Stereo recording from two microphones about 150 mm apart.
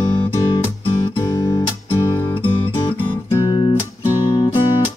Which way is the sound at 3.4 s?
30° left (ahead or behind).